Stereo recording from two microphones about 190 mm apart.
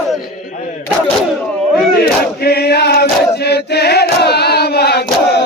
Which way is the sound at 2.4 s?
55° left (ahead or behind).